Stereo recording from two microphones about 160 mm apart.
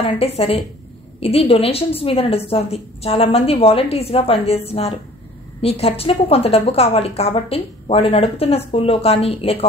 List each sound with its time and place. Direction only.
0.0 s a woman's voice: 35° left (ahead or behind)